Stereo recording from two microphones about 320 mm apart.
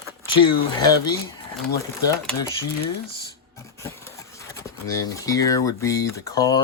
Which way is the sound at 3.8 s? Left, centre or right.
Centre.